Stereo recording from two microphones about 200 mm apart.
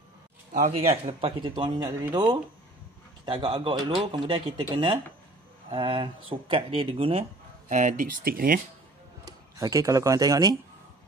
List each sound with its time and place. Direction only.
0.5 s speech: 35° right (ahead or behind)
5.7 s speech: 25° right (ahead or behind); by 8.5 s 45° right (ahead or behind)
9.2 s speech: 15° right (ahead or behind)